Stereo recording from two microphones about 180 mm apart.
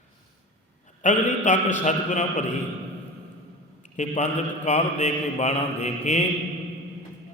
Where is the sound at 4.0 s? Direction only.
40° left (ahead or behind).